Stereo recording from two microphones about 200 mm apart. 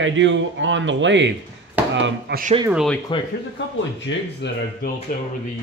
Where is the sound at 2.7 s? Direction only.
Centre (ahead or behind).